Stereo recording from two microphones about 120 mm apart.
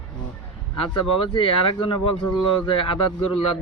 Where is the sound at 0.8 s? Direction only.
45° left (ahead or behind).